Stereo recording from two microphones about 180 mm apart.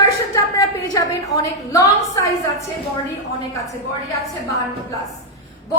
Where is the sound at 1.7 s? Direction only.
15° left (ahead or behind).